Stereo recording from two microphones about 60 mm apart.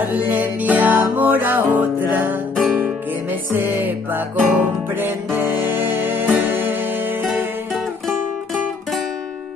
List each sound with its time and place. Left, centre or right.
0.0 s music: right
3.5 s music: right